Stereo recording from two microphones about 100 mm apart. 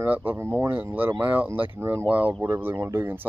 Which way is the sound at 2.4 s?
25° right (ahead or behind).